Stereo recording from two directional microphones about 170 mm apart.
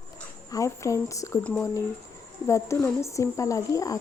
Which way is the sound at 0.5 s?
20° left (ahead or behind).